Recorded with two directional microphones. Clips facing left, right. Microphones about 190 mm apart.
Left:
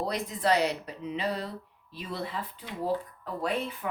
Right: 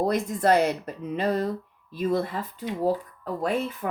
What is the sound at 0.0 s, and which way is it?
Speech, 50° right (ahead or behind).